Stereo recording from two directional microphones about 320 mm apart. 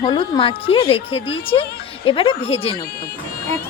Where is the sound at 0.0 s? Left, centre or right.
Centre.